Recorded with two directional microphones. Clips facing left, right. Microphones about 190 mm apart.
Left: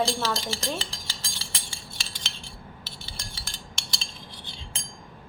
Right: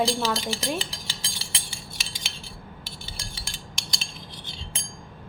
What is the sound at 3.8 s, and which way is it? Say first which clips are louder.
Cutlery: right 2 dB; 15° right (ahead or behind).